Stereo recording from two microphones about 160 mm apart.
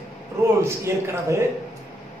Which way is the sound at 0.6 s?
15° right (ahead or behind).